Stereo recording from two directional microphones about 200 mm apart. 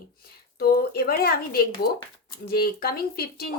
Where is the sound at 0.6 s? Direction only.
50° left (ahead or behind).